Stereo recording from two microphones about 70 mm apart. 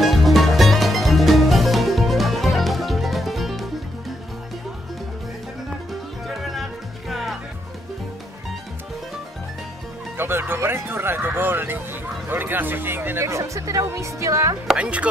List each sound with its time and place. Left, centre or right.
0.0 s music: centre
6.2 s music: centre
10.1 s music: right
12.3 s a sound: right
13.2 s speech: right
14.8 s chopping: centre